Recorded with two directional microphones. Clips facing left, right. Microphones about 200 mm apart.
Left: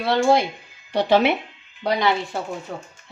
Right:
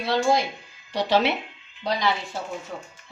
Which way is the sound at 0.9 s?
55° left (ahead or behind).